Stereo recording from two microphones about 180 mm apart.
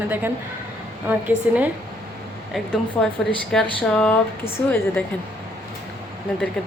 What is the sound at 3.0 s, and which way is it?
Speech, 5° left (ahead or behind).